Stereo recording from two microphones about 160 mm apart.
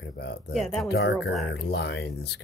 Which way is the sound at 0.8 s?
90° left.